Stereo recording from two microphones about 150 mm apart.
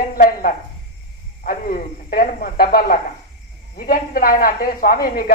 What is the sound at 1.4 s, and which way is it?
Speech, 70° left (ahead or behind).